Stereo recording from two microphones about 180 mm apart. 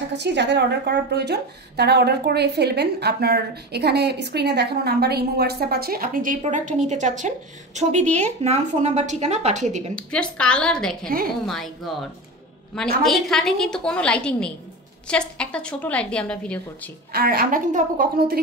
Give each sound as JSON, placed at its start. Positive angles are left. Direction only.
{"t": 0.2, "sound": "a woman's voice", "side_deg": -75}
{"t": 9.9, "sound": "a woman's voice", "side_deg": 5}
{"t": 17.1, "sound": "a woman's voice", "side_deg": -55}